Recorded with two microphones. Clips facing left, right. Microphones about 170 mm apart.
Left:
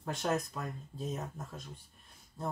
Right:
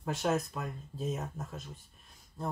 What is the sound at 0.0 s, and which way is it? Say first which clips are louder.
Speech: right 2 dB; 5° right (ahead or behind).